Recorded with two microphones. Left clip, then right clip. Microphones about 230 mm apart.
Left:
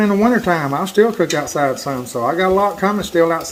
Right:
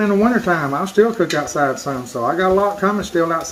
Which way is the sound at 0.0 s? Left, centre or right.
Left.